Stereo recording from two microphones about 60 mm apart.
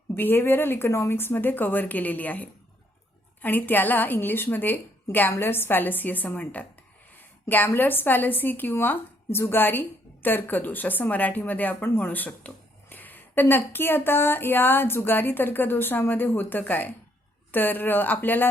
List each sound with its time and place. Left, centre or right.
0.1 s speech: left
1.2 s speech: left
7.2 s a sound: left
7.7 s speech: left